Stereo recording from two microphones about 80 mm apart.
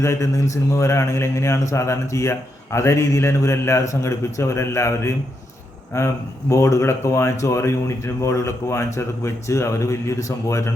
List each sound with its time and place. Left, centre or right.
0.0 s speech: left